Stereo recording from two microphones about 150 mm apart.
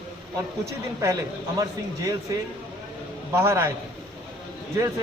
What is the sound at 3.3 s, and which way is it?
Speech, 20° right (ahead or behind).